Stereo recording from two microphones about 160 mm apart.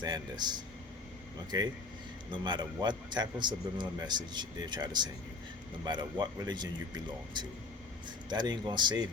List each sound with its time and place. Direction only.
0.0 s a man's voice: 25° right (ahead or behind)